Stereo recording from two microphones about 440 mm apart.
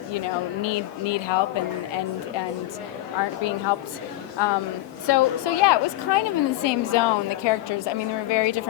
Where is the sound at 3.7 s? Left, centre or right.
Left.